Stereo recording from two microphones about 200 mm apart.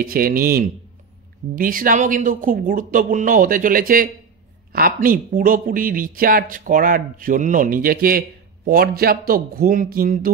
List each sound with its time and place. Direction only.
0.0 s speech: 45° right (ahead or behind)